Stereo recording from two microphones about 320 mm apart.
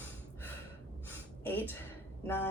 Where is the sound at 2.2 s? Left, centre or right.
Centre.